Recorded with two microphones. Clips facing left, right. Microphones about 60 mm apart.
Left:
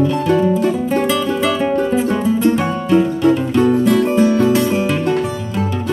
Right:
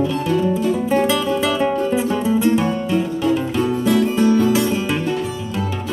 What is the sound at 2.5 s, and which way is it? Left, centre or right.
Music, left.